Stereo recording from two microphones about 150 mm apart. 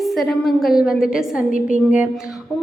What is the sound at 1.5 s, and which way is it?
Speech, 60° left (ahead or behind).